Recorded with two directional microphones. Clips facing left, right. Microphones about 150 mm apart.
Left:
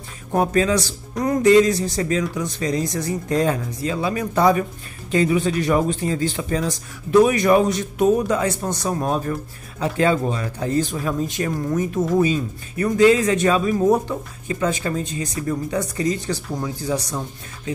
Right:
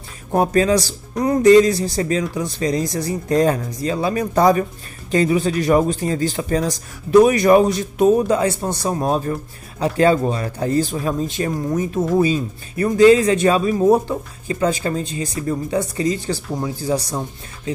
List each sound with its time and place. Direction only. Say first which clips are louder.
0.3 s speech: right 3 dB; 35° right (ahead or behind)